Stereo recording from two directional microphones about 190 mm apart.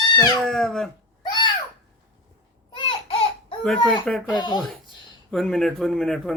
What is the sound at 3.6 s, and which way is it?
A man's voice, centre (ahead or behind).